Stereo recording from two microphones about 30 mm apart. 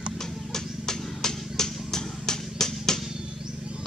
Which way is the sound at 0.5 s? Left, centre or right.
Centre.